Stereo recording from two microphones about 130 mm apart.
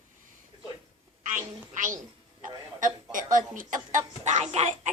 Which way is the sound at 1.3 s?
80° right.